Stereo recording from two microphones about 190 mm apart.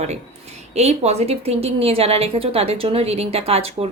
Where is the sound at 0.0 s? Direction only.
35° right (ahead or behind).